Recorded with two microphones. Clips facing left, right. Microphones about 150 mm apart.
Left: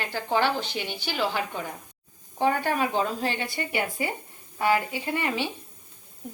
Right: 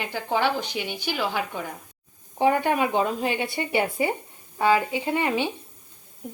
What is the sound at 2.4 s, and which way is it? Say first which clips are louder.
A woman's voice: right 3 dB; 20° right (ahead or behind).